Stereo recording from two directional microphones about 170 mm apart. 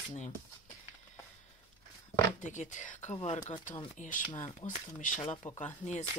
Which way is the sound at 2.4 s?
45° left (ahead or behind).